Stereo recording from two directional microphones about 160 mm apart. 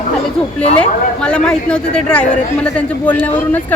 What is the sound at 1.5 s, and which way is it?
Speech, 5° left (ahead or behind).